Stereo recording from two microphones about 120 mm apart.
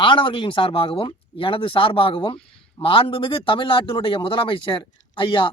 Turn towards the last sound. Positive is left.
turn(degrees=40)  # may be behind; listen again after turning